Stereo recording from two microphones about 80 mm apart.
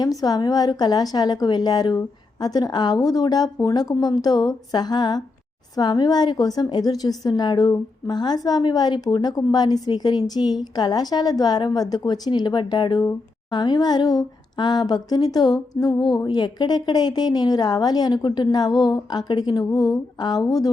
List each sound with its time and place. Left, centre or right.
0.0 s speech: left
18.2 s speech: left